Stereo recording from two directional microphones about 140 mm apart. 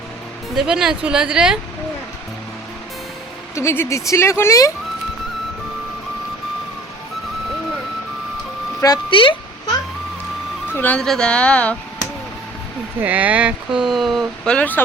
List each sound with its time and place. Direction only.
0.5 s speech: 5° right (ahead or behind)
3.5 s speech: 20° left (ahead or behind)
8.8 s music: 30° left (ahead or behind)
10.7 s speech: 15° left (ahead or behind)
13.0 s speech: 10° right (ahead or behind); by 14.8 s 10° left (ahead or behind)